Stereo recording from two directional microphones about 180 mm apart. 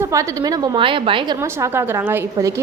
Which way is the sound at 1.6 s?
10° right (ahead or behind).